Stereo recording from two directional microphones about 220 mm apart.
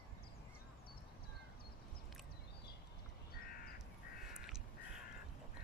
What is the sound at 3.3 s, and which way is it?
Crow, 45° left (ahead or behind).